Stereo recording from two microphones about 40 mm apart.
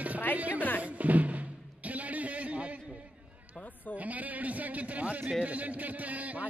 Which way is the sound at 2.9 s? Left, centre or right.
Right.